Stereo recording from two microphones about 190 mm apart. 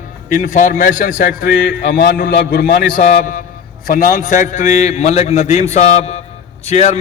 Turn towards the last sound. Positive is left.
turn(degrees=35)  # may be behind; listen again after turning